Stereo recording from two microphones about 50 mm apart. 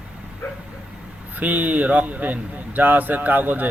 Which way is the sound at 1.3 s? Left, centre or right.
Right.